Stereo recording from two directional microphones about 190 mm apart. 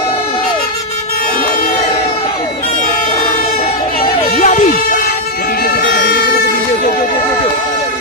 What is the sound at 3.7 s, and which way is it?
Music, 30° left (ahead or behind).